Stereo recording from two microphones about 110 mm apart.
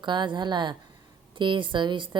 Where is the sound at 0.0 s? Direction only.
45° right (ahead or behind).